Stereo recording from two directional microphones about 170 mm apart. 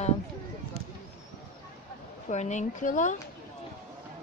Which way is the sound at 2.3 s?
45° left (ahead or behind).